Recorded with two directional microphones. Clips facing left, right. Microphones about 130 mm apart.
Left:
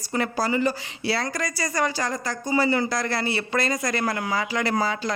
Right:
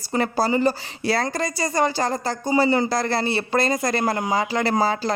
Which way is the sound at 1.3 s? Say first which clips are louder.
Right 4 dB; 25° right (ahead or behind).